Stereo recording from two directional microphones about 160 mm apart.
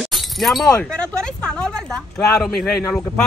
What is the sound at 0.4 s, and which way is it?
A man's voice, centre (ahead or behind).